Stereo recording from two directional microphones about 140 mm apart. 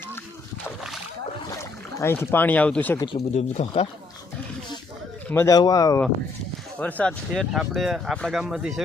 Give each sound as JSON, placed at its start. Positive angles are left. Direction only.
{"t": 2.0, "sound": "speech", "side_deg": 15}
{"t": 3.1, "sound": "speech", "side_deg": 50}
{"t": 5.3, "sound": "speech", "side_deg": 20}
{"t": 6.7, "sound": "speech", "side_deg": 10}